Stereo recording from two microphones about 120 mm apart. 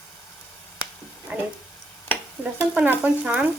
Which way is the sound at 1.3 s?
15° right (ahead or behind).